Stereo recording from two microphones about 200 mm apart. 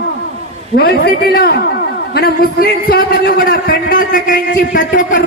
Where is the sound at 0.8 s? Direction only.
50° left (ahead or behind).